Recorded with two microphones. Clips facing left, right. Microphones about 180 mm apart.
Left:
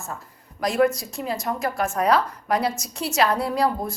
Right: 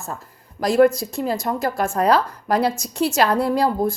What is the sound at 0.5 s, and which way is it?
A woman's voice, 35° right (ahead or behind).